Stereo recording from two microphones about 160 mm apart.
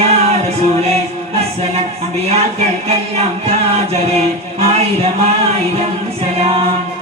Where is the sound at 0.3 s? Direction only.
40° right (ahead or behind).